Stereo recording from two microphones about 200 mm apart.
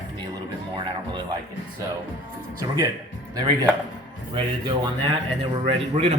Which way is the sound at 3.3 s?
20° right (ahead or behind).